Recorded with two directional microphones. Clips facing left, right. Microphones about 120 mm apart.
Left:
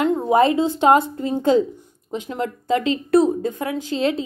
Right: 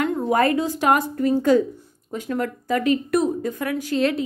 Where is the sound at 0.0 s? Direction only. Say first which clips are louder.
Left 3 dB; 20° left (ahead or behind).